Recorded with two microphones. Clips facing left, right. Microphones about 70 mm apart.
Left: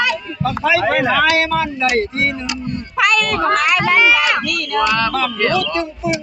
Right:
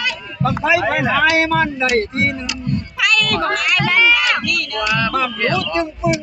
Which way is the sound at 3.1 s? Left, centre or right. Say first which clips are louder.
Left 1 dB; left.